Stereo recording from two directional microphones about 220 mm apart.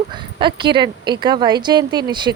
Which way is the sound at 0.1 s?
20° right (ahead or behind).